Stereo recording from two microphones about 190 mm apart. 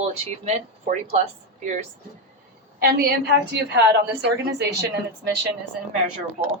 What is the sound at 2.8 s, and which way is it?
A woman's voice, 55° right (ahead or behind).